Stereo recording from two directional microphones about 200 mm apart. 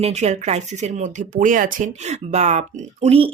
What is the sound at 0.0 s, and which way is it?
Speech, 35° right (ahead or behind).